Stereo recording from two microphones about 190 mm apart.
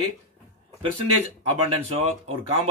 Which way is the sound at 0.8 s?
30° right (ahead or behind).